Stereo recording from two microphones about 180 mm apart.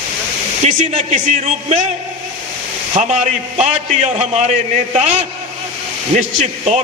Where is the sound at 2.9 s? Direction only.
40° right (ahead or behind).